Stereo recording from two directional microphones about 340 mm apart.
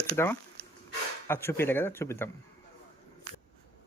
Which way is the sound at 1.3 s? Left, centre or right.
Centre.